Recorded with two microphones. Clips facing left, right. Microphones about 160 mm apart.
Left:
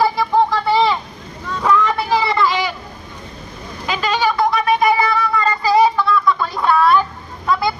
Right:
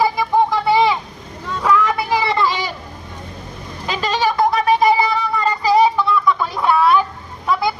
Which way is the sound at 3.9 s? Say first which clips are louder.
Left 1 dB; 35° right (ahead or behind).